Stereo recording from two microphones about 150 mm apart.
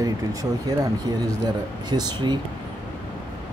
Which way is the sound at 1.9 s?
30° right (ahead or behind).